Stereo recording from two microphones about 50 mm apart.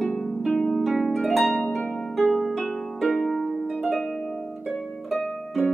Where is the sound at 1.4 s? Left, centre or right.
Left.